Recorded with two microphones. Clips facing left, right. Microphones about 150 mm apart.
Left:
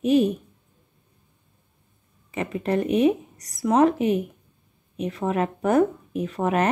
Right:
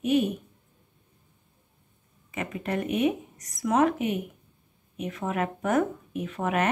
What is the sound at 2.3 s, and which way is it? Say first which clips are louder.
Speech: left 6 dB; 30° left (ahead or behind).